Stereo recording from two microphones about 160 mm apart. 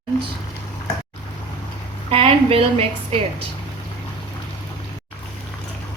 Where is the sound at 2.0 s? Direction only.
35° right (ahead or behind).